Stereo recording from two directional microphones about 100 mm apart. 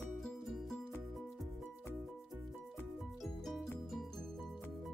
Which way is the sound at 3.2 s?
Centre (ahead or behind).